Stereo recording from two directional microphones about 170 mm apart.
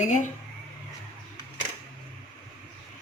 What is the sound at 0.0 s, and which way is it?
Speech, 45° left (ahead or behind).